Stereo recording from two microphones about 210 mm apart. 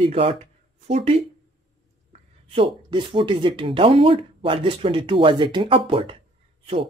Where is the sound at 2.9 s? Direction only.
25° right (ahead or behind).